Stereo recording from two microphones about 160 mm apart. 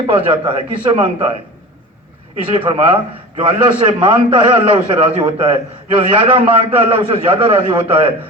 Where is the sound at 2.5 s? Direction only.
35° right (ahead or behind).